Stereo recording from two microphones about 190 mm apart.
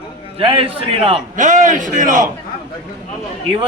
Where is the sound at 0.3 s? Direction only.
30° right (ahead or behind).